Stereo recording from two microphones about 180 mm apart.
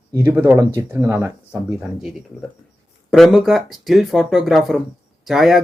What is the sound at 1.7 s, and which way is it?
Speech, centre (ahead or behind).